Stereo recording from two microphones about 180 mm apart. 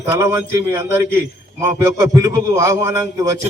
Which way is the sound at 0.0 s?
15° right (ahead or behind).